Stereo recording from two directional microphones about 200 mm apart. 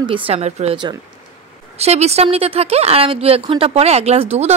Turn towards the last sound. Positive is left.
turn(degrees=-30)  # may be behind; listen again after turning